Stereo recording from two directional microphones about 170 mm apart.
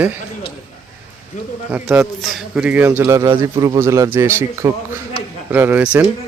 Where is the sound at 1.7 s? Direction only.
10° right (ahead or behind).